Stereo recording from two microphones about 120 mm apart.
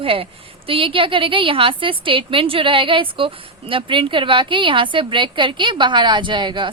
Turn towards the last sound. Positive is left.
turn(degrees=-40)  # may be behind; listen again after turning